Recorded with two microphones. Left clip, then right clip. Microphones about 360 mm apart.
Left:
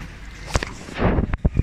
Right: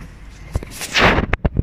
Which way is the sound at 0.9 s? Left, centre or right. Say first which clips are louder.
Right 10 dB; right.